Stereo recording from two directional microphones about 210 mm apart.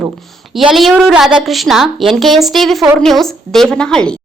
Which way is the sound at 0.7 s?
Centre (ahead or behind).